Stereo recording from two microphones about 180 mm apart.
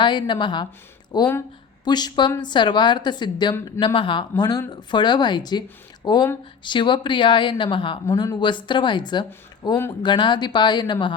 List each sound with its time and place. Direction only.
0.0 s speech: 25° left (ahead or behind)